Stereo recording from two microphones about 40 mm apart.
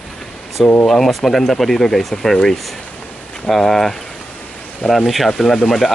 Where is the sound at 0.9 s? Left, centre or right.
Centre.